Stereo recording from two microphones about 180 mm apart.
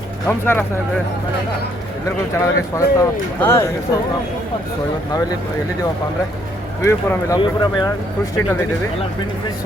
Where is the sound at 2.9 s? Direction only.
15° left (ahead or behind).